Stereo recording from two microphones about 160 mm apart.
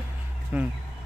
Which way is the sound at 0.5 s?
10° right (ahead or behind).